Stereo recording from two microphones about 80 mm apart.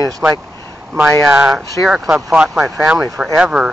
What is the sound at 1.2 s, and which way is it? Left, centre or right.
Speech, centre.